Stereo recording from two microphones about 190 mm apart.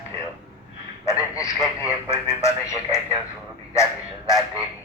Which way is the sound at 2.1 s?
15° left (ahead or behind).